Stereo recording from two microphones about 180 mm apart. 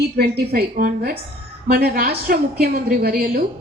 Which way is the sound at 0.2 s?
60° right (ahead or behind).